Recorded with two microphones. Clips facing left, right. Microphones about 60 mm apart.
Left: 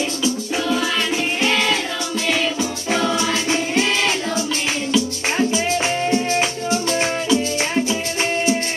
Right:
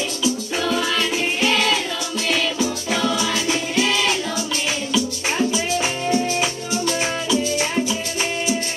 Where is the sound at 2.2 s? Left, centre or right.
Left.